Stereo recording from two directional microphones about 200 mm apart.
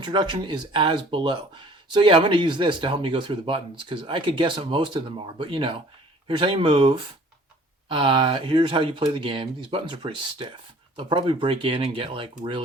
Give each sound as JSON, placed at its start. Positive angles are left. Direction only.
{"t": 0.0, "sound": "speech", "side_deg": -20}